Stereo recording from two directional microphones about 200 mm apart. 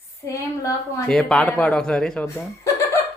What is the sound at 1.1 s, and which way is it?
A man's voice, 5° left (ahead or behind).